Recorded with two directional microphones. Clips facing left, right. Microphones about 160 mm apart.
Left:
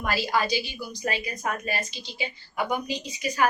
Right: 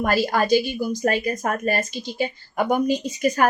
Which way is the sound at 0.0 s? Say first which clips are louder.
Right 6 dB; 50° right (ahead or behind).